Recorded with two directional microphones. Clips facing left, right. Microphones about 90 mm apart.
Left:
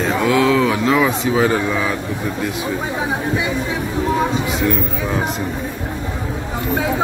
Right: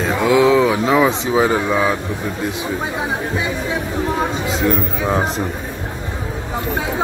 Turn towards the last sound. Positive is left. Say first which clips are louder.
# right 2 dB
turn(degrees=-35)  # may be behind; listen again after turning